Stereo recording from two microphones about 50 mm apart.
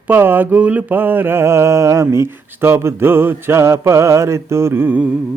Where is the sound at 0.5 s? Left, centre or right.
Right.